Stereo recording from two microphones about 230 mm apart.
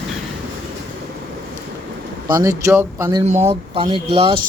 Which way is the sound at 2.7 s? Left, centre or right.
Centre.